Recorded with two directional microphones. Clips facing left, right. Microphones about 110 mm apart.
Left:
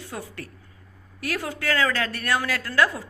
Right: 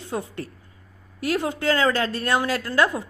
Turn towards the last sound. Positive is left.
turn(degrees=-25)  # may be behind; listen again after turning